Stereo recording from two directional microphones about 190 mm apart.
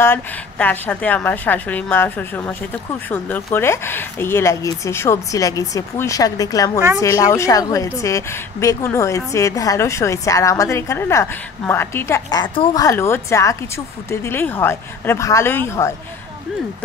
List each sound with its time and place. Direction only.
0.0 s speech: 10° left (ahead or behind)